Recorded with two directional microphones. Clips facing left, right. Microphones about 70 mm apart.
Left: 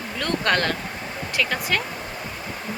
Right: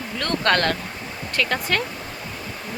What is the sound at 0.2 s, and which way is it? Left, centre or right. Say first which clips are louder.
Speech: right 2 dB; centre.